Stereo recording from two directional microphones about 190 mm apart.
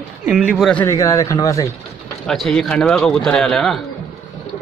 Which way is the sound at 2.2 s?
Centre (ahead or behind).